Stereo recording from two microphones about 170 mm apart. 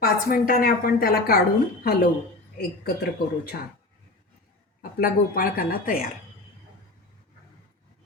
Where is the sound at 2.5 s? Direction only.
70° left (ahead or behind).